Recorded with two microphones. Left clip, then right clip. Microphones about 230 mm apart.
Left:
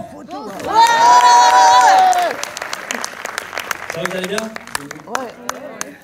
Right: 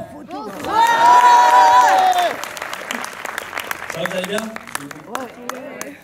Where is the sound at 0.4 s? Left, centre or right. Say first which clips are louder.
Left 4 dB; left.